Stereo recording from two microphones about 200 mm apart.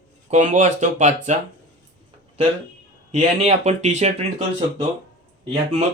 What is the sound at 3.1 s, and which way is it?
Speech, 35° right (ahead or behind).